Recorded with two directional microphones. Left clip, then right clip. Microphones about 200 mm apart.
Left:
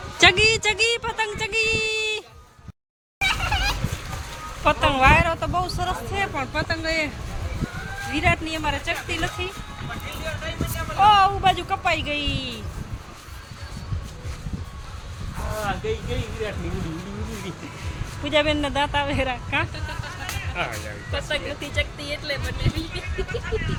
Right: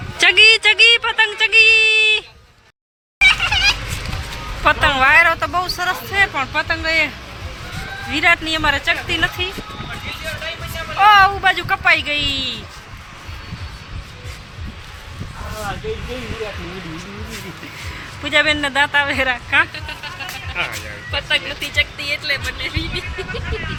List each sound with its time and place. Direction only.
0.2 s a sound: 5° left (ahead or behind)
3.2 s fowl: 30° left (ahead or behind)
4.6 s speech: 5° right (ahead or behind)
8.1 s speech: centre (ahead or behind)
11.0 s speech: 5° right (ahead or behind)
18.2 s speech: 5° right (ahead or behind)
20.6 s speech: 65° left (ahead or behind)
21.1 s speech: 20° left (ahead or behind)